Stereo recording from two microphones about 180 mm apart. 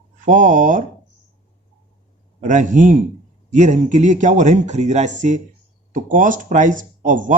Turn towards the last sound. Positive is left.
turn(degrees=-45)  # may be behind; listen again after turning